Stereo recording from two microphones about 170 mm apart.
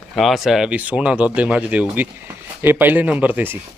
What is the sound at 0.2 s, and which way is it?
Speech, centre (ahead or behind).